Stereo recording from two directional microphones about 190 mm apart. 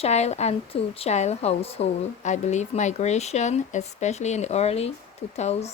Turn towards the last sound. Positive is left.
turn(degrees=35)  # may be behind; listen again after turning